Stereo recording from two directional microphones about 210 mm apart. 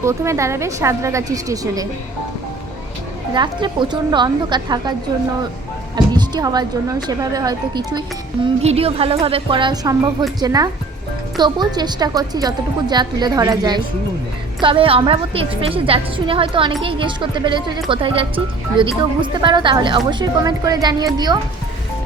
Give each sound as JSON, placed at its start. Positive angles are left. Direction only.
{"t": 0.0, "sound": "a woman's voice", "side_deg": -15}
{"t": 3.3, "sound": "speech", "side_deg": -20}
{"t": 6.1, "sound": "a woman's voice", "side_deg": -20}